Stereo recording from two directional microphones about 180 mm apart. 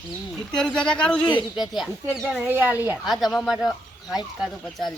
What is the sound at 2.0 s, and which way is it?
Speech, 10° right (ahead or behind).